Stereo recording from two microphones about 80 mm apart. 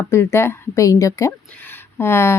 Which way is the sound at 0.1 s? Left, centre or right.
Left.